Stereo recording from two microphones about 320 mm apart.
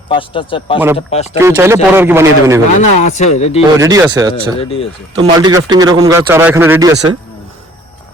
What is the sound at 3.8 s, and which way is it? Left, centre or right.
Speech, centre.